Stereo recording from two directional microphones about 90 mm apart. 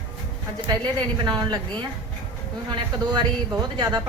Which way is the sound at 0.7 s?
55° right (ahead or behind).